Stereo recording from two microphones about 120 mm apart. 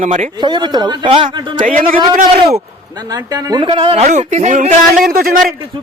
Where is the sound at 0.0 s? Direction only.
90° right.